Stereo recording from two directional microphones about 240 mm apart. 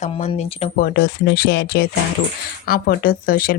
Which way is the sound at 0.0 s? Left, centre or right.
Left.